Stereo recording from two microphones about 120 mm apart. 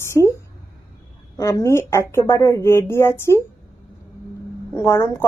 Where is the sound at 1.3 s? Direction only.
25° left (ahead or behind).